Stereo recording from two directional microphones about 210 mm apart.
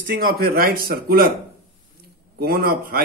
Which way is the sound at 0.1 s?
45° right (ahead or behind).